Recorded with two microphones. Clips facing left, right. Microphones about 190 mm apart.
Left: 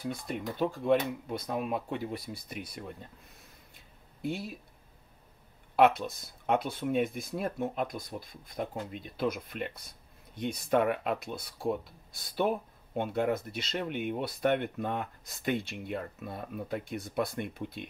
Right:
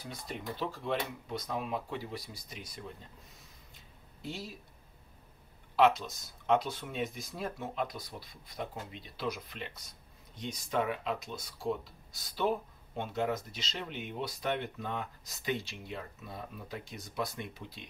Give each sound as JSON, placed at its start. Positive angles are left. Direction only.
{"t": 0.0, "sound": "speech", "side_deg": 55}
{"t": 4.2, "sound": "speech", "side_deg": 55}
{"t": 5.8, "sound": "speech", "side_deg": 55}